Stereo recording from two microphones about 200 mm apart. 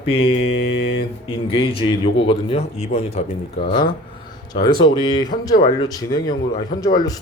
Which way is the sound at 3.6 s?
20° left (ahead or behind).